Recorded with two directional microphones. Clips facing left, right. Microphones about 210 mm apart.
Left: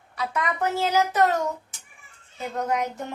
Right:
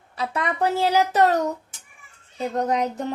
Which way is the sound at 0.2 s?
30° right (ahead or behind).